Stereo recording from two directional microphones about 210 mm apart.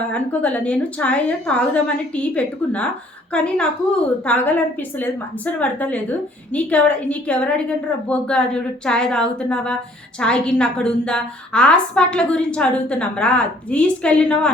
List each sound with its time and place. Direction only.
0.1 s a woman's voice: 5° left (ahead or behind)